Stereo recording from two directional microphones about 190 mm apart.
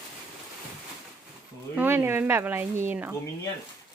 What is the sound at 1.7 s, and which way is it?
Speech, 10° right (ahead or behind).